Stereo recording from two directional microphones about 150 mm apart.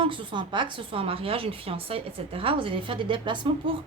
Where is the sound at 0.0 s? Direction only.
35° right (ahead or behind).